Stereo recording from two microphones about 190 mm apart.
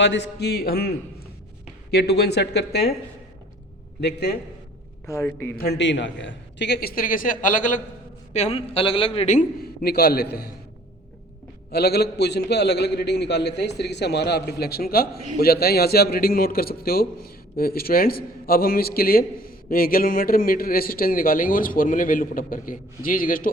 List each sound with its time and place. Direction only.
0.0 s a man's voice: 70° left (ahead or behind)
4.0 s a man's voice: 60° left (ahead or behind)
5.0 s a man's voice: 15° left (ahead or behind)
5.5 s a man's voice: 60° left (ahead or behind); by 9.4 s 35° left (ahead or behind)
9.8 s a man's voice: 55° left (ahead or behind)
11.7 s a man's voice: 60° left (ahead or behind)